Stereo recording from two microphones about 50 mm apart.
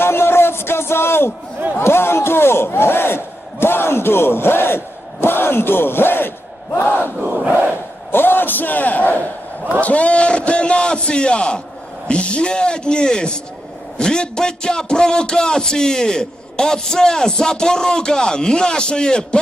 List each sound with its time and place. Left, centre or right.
0.0 s a sound: left
1.8 s speech: left
7.2 s crowd: right
8.1 s a man's voice: left; by 19.4 s centre